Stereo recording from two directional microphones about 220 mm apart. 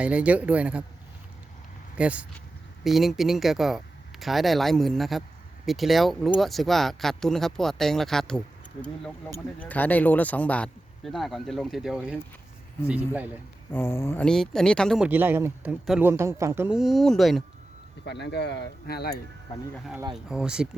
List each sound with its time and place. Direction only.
0.0 s speech: 5° right (ahead or behind)
2.0 s a man's voice: 5° right (ahead or behind)
13.7 s speech: 10° left (ahead or behind)
18.0 s speech: 50° left (ahead or behind)
20.1 s speech: 5° right (ahead or behind)